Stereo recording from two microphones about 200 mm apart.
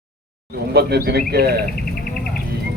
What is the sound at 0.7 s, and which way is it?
Speech, 55° right (ahead or behind).